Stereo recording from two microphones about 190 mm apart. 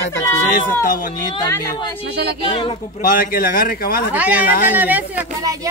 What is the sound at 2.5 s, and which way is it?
Speech, 25° left (ahead or behind).